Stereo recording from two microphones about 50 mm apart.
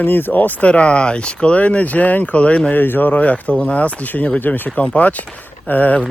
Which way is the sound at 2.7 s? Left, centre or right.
Left.